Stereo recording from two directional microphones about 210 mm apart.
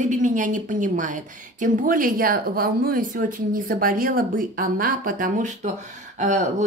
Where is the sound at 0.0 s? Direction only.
35° right (ahead or behind).